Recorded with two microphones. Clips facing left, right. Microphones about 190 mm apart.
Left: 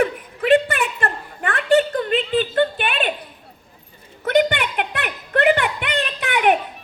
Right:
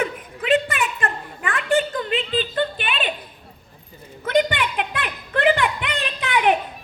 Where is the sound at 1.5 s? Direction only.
60° left (ahead or behind).